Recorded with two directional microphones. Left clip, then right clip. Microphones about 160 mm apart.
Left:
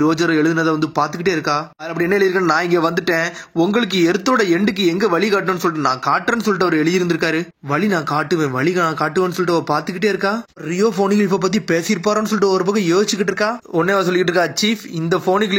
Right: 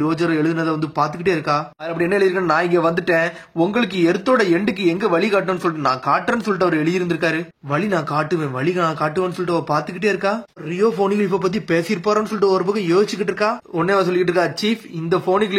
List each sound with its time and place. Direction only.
0.0 s speech: 25° left (ahead or behind)